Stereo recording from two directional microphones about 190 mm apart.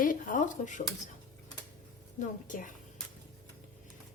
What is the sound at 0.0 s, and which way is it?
Speech, 45° left (ahead or behind).